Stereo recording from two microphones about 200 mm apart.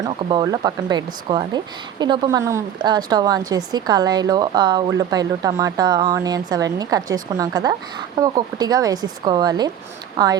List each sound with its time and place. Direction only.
0.0 s speech: 25° right (ahead or behind)